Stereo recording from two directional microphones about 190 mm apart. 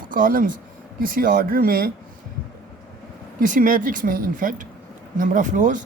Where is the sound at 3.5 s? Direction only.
45° right (ahead or behind).